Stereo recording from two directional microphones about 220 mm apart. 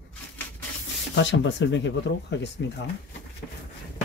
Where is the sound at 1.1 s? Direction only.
55° left (ahead or behind).